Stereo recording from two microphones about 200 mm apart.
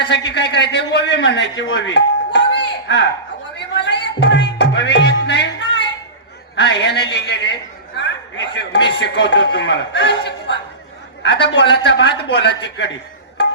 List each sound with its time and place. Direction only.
0.0 s a man's voice: 60° left (ahead or behind)
3.8 s music: 60° left (ahead or behind)
6.6 s a sound: 60° left (ahead or behind)
7.1 s a man's voice: 60° left (ahead or behind)